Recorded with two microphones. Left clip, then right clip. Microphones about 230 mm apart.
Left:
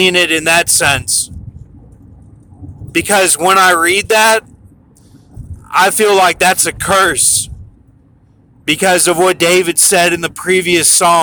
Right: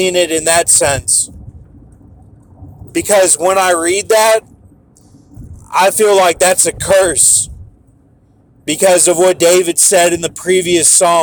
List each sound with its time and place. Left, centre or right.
0.0 s speech: centre
2.9 s speech: centre
5.6 s speech: centre
8.6 s speech: centre